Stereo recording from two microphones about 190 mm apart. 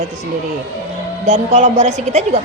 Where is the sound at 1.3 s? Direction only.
35° right (ahead or behind).